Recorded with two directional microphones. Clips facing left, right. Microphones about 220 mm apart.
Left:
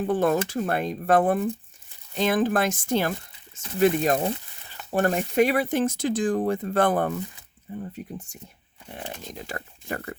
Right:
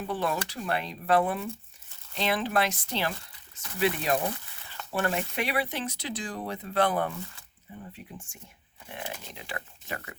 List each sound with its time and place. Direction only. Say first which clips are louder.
0.0 s speech: left 8 dB; 50° left (ahead or behind)
4.2 s a sound: left 5 dB; 20° left (ahead or behind)
4.9 s speech: left 8 dB; 40° left (ahead or behind)